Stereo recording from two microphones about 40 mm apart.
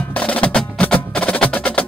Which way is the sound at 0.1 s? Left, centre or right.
Left.